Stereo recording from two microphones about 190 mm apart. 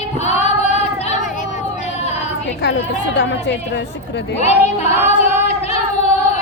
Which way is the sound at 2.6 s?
65° left (ahead or behind).